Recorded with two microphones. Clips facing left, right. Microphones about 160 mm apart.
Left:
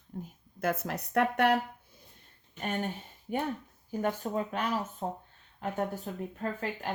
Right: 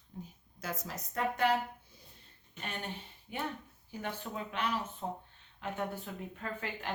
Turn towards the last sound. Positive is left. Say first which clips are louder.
# left 5 dB
turn(degrees=40)  # may be behind; listen again after turning